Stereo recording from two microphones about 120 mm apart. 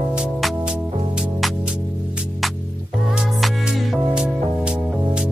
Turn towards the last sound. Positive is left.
turn(degrees=-5)  # may be behind; listen again after turning